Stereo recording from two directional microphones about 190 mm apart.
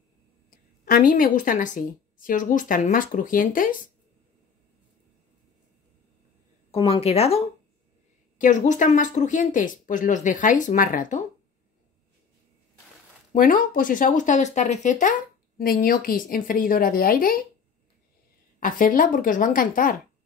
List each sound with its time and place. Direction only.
0.5 s a woman's voice: 50° left (ahead or behind)
6.7 s speech: 30° left (ahead or behind)
13.3 s speech: 45° left (ahead or behind)
15.5 s speech: 50° left (ahead or behind)
18.6 s speech: 45° left (ahead or behind)